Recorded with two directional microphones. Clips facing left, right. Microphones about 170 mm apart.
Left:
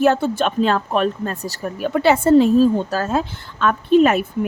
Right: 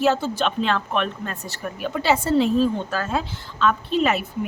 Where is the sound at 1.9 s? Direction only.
55° left (ahead or behind).